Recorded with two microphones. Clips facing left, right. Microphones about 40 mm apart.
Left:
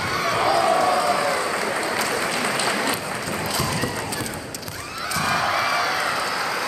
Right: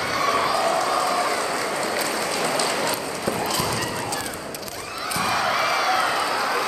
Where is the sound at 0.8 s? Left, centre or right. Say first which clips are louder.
Left 2 dB; centre.